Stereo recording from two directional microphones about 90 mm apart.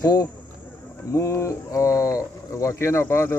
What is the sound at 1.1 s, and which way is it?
Speech, 35° left (ahead or behind).